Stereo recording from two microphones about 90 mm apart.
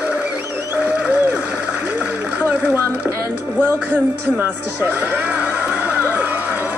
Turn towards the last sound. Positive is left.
turn(degrees=-20)  # may be behind; listen again after turning